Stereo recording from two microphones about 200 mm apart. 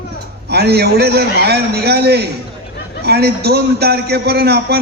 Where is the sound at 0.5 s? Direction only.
55° right (ahead or behind).